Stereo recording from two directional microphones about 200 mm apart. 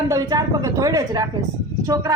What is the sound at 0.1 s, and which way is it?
A woman's voice, 15° right (ahead or behind).